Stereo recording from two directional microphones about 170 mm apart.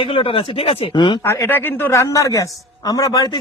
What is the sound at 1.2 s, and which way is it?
A man's voice, 15° left (ahead or behind).